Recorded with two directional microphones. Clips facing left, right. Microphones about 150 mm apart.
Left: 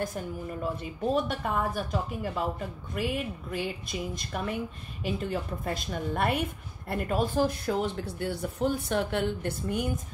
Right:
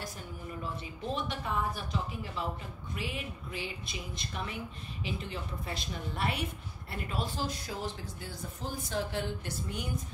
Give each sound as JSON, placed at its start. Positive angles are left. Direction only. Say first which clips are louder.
{"t": 1.1, "sound": "a woman's voice", "louder": "left 5 dB", "side_deg": 45}